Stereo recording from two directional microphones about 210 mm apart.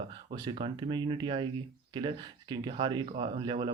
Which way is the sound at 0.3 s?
20° right (ahead or behind).